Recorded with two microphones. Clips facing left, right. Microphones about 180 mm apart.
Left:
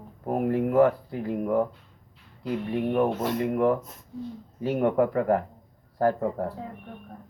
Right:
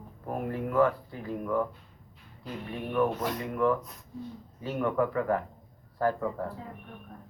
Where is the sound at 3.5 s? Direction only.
40° left (ahead or behind).